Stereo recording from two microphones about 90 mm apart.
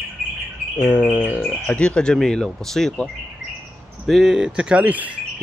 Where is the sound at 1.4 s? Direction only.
5° left (ahead or behind).